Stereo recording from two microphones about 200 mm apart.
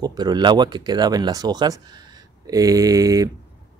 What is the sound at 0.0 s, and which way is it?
Speech, 20° right (ahead or behind).